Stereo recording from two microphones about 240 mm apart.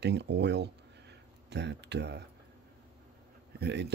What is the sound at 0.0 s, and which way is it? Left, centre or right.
Speech, right.